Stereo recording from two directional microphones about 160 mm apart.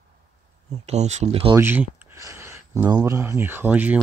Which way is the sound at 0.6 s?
45° right (ahead or behind).